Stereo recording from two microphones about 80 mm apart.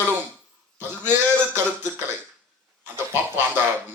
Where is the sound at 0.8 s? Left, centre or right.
Right.